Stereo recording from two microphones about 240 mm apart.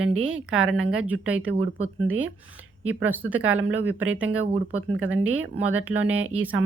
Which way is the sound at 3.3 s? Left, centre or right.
Right.